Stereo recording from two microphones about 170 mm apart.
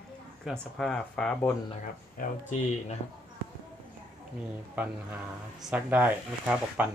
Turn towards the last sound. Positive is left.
turn(degrees=-10)  # may be behind; listen again after turning